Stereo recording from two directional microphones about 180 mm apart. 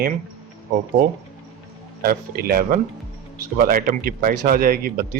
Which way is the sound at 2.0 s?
55° right (ahead or behind).